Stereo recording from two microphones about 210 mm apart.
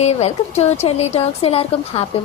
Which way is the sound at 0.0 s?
30° left (ahead or behind).